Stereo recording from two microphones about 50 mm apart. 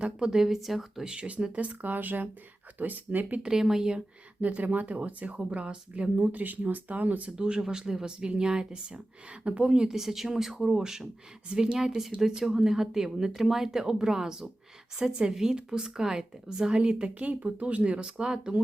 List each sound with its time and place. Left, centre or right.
0.3 s speech: centre
1.0 s speech: right
3.4 s a woman's voice: centre
4.4 s speech: right
7.3 s a woman's voice: centre
9.9 s a woman's voice: centre